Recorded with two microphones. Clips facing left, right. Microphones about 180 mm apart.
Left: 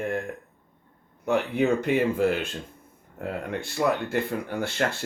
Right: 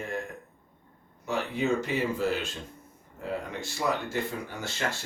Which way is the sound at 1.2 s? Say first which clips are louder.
Left 6 dB; 60° left (ahead or behind).